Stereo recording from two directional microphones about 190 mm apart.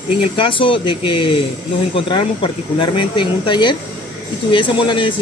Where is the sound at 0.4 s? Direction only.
25° left (ahead or behind).